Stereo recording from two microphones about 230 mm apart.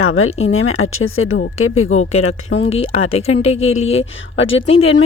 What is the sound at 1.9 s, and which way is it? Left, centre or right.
Speech, left.